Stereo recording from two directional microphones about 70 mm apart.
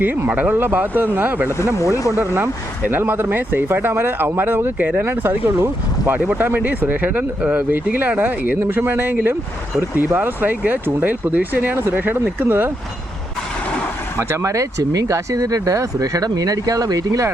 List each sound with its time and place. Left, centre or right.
0.0 s speech: right
1.5 s speech: left
2.0 s speech: right
10.2 s speech: right
14.2 s speech: right